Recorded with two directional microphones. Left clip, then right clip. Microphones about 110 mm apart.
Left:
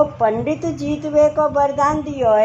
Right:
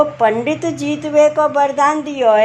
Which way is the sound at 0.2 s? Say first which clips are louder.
Right 3 dB; 50° right (ahead or behind).